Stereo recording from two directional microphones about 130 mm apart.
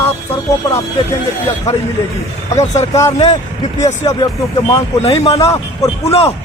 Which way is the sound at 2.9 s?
25° left (ahead or behind).